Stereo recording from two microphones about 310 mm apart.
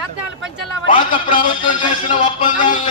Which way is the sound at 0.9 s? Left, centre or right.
Left.